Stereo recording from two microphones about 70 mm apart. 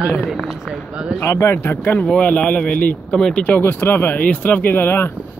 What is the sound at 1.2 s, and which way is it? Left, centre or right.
Speech, left.